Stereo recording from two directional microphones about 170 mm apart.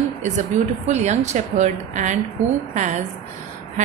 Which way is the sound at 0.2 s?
45° right (ahead or behind).